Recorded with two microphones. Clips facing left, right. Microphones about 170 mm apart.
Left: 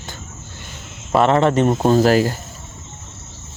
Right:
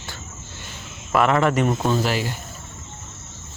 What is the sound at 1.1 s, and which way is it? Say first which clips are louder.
Speech: left 4 dB; 30° left (ahead or behind).